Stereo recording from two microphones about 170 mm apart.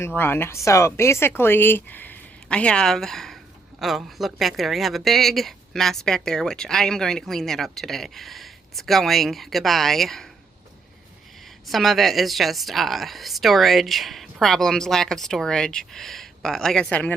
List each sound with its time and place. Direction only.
0.0 s a woman's voice: 15° left (ahead or behind)
11.6 s a woman's voice: centre (ahead or behind)